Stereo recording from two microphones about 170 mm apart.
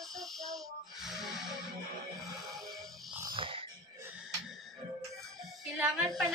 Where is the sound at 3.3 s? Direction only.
30° right (ahead or behind).